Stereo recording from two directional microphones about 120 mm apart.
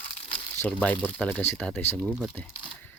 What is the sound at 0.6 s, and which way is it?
Speech, 15° left (ahead or behind).